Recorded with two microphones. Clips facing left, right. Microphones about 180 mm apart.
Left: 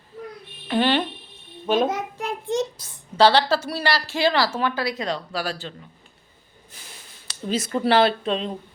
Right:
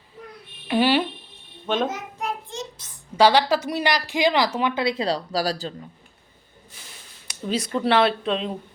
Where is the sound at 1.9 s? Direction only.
65° left (ahead or behind).